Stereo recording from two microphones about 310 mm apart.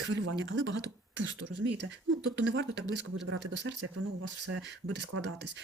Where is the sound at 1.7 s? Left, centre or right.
Right.